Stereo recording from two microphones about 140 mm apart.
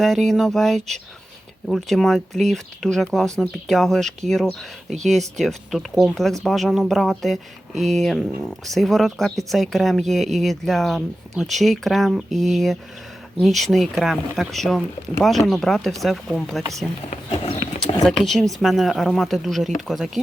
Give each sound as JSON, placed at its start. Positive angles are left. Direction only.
{"t": 0.0, "sound": "speech", "side_deg": 0}
{"t": 5.4, "sound": "speech", "side_deg": 0}
{"t": 17.1, "sound": "speech", "side_deg": 50}
{"t": 17.7, "sound": "speech", "side_deg": 0}